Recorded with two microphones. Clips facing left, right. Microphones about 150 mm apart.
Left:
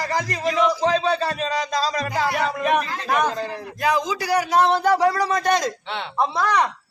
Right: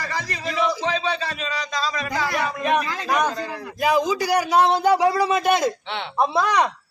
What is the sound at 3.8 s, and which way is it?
A man's voice, 10° right (ahead or behind).